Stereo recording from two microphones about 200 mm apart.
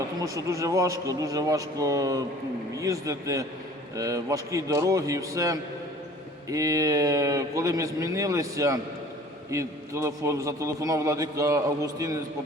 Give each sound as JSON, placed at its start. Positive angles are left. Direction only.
{"t": 0.2, "sound": "a man's voice", "side_deg": -15}